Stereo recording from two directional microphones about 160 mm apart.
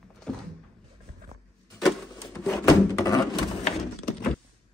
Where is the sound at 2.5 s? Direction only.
20° left (ahead or behind).